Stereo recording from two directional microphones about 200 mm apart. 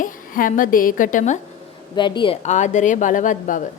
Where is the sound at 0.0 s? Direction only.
40° left (ahead or behind).